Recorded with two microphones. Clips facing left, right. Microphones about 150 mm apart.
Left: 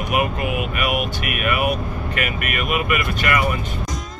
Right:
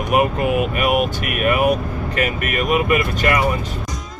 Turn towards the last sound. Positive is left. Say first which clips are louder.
# right 3 dB
turn(degrees=-30)  # may be behind; listen again after turning